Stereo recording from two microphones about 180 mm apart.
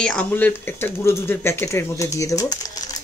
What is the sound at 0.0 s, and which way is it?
Speech, 5° left (ahead or behind).